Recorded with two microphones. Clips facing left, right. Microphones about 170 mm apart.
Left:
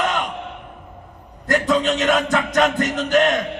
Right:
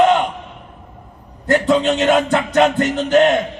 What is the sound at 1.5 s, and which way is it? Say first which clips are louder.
Speech: right 4 dB; 30° right (ahead or behind).